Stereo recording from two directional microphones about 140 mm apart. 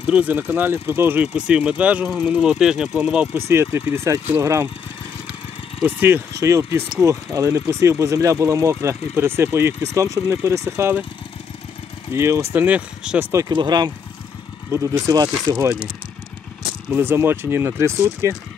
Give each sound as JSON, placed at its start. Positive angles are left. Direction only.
{"t": 0.0, "sound": "speech", "side_deg": -10}
{"t": 3.3, "sound": "speech", "side_deg": -20}
{"t": 5.8, "sound": "speech", "side_deg": -15}
{"t": 12.1, "sound": "speech", "side_deg": -20}
{"t": 13.5, "sound": "speech", "side_deg": -30}
{"t": 16.9, "sound": "speech", "side_deg": -15}